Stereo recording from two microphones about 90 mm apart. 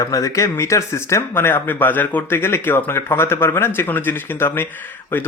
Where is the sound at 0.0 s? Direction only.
40° left (ahead or behind).